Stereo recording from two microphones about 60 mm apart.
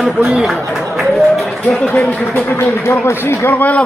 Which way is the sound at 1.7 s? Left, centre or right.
Centre.